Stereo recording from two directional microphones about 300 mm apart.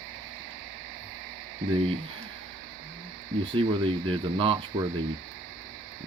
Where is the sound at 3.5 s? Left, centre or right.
Centre.